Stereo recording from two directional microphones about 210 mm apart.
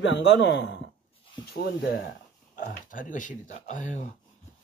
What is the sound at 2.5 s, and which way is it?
Speech, 40° left (ahead or behind).